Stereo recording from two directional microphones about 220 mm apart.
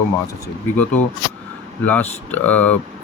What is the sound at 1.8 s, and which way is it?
Speech, 10° left (ahead or behind).